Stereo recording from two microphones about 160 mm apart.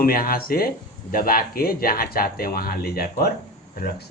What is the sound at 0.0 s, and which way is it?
Speech, 65° left (ahead or behind).